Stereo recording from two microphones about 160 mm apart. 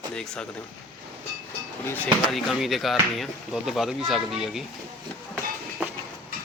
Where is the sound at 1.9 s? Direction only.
10° left (ahead or behind).